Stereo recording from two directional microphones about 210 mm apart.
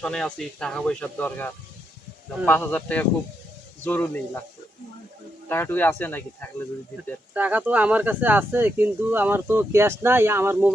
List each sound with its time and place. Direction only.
0.0 s speech: 5° left (ahead or behind)
5.5 s speech: 10° left (ahead or behind)
7.3 s speech: 10° right (ahead or behind)